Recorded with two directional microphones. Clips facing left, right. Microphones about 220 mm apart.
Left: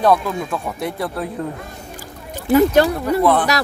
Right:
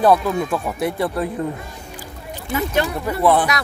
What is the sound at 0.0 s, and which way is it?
Speech, 5° right (ahead or behind).